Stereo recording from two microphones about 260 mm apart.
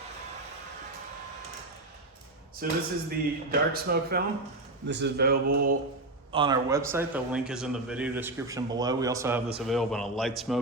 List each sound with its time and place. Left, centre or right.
2.6 s speech: right
6.3 s a man's voice: centre
9.6 s a man's voice: centre